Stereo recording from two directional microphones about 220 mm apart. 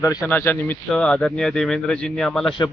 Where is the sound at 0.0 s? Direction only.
15° left (ahead or behind).